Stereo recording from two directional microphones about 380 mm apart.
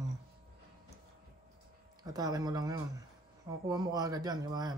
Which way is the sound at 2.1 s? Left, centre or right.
Centre.